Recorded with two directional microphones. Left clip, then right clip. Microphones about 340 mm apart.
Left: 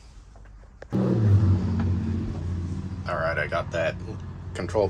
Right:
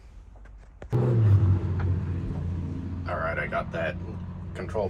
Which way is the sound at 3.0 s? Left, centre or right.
Centre.